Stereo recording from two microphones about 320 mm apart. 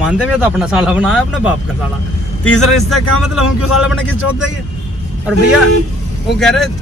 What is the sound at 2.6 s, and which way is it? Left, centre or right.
Speech, centre.